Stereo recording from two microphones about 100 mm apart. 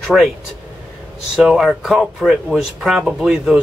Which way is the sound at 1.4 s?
5° right (ahead or behind).